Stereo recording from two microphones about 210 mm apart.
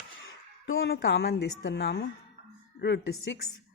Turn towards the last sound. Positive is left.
turn(degrees=55)  # may be behind; listen again after turning